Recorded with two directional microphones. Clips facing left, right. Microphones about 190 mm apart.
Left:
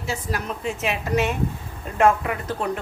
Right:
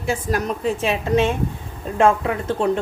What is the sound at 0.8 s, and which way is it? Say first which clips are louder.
A woman's voice: right 3 dB; 30° right (ahead or behind).